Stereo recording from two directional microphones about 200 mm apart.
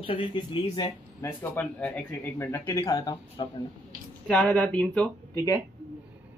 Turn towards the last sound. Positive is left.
turn(degrees=10)  # may be behind; listen again after turning